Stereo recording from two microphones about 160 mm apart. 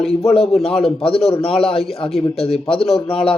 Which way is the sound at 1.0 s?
35° left (ahead or behind).